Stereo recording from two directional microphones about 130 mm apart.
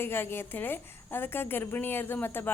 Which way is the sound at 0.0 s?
15° left (ahead or behind).